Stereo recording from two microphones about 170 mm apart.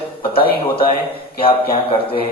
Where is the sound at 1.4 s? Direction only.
30° left (ahead or behind).